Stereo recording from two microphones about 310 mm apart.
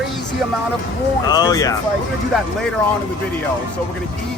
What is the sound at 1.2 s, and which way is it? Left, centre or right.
Speech, centre.